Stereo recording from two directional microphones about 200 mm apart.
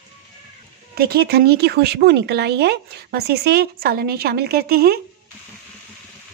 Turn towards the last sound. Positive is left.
turn(degrees=-50)  # may be behind; listen again after turning